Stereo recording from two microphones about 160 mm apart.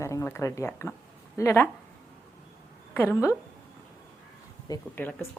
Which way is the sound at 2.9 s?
15° left (ahead or behind).